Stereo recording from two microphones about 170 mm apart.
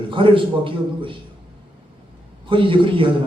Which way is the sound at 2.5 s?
30° right (ahead or behind).